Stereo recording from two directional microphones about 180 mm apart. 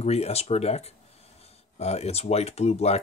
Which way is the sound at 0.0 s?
35° left (ahead or behind).